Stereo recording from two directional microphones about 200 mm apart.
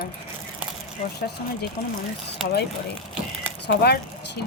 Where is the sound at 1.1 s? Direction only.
50° left (ahead or behind).